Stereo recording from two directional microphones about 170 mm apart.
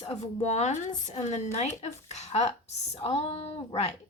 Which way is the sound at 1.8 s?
40° left (ahead or behind).